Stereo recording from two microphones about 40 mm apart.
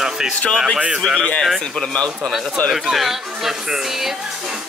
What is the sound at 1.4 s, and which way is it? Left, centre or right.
Speech, centre.